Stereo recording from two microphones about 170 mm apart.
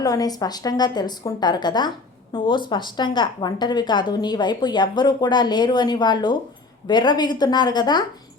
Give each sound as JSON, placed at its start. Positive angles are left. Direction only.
{"t": 0.0, "sound": "a woman's voice", "side_deg": 20}